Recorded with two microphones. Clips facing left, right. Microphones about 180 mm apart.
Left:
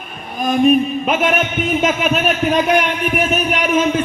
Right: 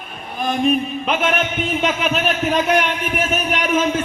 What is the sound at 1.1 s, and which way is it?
A man's voice, 10° left (ahead or behind).